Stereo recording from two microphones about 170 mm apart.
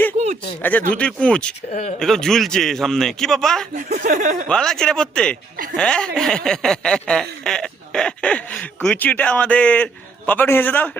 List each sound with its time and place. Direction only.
0.6 s speech: 10° left (ahead or behind)
1.7 s speech: 45° left (ahead or behind)
2.0 s a man's voice: 5° left (ahead or behind)
3.8 s speech: 50° right (ahead or behind)
4.4 s a man's voice: 5° left (ahead or behind)